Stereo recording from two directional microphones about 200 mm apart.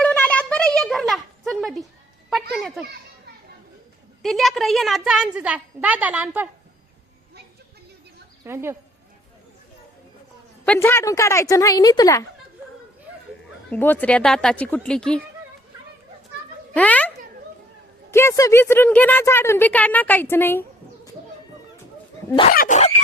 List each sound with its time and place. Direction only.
0.0 s a sound: 5° left (ahead or behind)
4.2 s a woman's voice: centre (ahead or behind)
8.4 s speech: 10° right (ahead or behind)
10.7 s speech: 10° left (ahead or behind)
13.7 s a woman's voice: 10° left (ahead or behind)
16.7 s speech: 5° left (ahead or behind)
18.1 s speech: 15° left (ahead or behind)
22.5 s speech: 45° left (ahead or behind)